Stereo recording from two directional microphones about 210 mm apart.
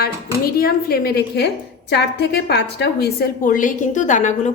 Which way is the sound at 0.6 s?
45° left (ahead or behind).